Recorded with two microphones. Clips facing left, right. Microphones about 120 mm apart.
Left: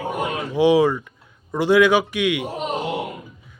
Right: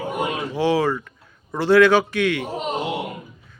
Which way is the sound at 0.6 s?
15° left (ahead or behind).